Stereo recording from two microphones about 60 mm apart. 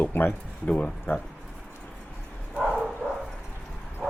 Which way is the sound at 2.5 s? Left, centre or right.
Centre.